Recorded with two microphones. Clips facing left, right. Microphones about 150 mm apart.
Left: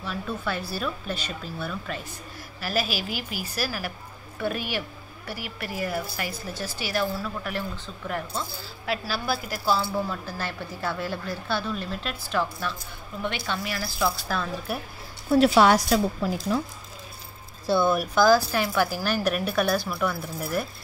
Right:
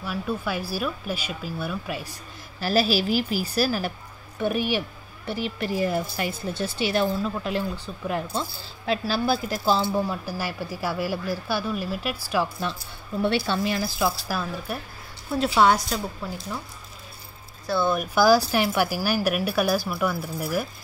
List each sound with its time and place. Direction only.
0.0 s speech: 5° right (ahead or behind)
2.6 s a woman's voice: 35° right (ahead or behind)
4.4 s speech: 15° right (ahead or behind)
8.4 s speech: 25° right (ahead or behind); by 12.4 s 10° right (ahead or behind)
12.7 s speech: 25° right (ahead or behind)
14.2 s speech: 5° right (ahead or behind)
15.3 s a woman's voice: 70° left (ahead or behind)
18.0 s speech: 10° right (ahead or behind)